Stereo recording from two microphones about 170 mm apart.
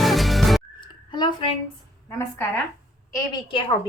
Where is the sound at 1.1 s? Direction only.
25° left (ahead or behind).